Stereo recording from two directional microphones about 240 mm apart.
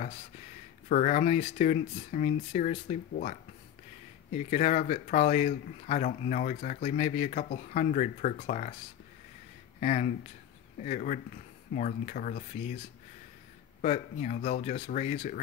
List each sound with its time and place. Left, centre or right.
0.8 s speech: left
9.8 s speech: left
13.7 s speech: left